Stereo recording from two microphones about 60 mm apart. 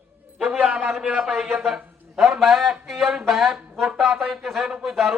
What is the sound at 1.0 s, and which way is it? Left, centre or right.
A man's voice, centre.